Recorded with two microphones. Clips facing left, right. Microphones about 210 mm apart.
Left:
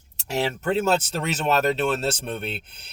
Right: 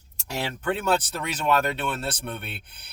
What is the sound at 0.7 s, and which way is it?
Speech, 25° left (ahead or behind).